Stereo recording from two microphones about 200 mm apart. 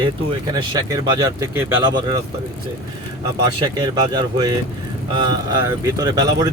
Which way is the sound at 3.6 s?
20° right (ahead or behind).